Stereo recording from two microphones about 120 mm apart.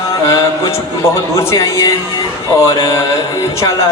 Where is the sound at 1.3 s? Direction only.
25° left (ahead or behind).